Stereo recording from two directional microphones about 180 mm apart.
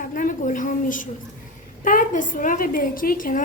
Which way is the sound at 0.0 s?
45° left (ahead or behind).